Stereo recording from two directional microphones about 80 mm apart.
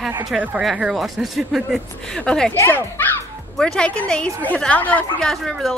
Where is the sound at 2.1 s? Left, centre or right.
Centre.